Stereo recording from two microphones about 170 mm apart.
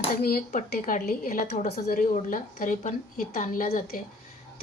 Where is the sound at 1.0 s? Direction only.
60° left (ahead or behind).